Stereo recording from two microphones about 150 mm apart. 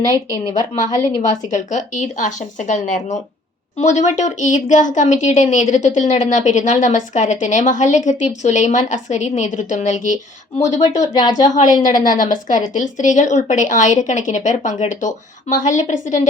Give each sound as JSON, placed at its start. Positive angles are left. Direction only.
{"t": 0.9, "sound": "speech", "side_deg": 25}
{"t": 1.5, "sound": "a woman's voice", "side_deg": 55}
{"t": 10.9, "sound": "speech", "side_deg": 25}
{"t": 12.0, "sound": "speech", "side_deg": 60}